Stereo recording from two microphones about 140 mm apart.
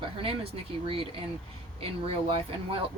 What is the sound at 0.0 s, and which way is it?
A woman's voice, 40° right (ahead or behind).